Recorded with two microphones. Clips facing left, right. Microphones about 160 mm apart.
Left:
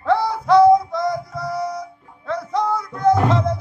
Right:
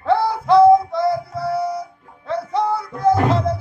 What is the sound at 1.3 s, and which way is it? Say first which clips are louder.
Music: right 3 dB; 30° right (ahead or behind).